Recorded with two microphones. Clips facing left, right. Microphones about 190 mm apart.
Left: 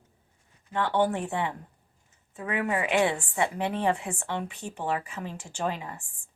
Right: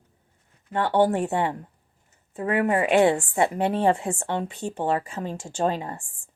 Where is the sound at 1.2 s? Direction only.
40° right (ahead or behind).